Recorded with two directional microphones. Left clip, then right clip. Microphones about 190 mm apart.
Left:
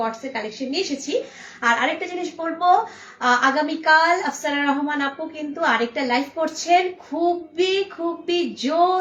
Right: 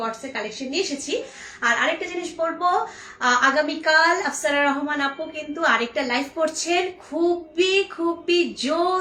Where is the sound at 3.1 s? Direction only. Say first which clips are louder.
Even; 20° right (ahead or behind).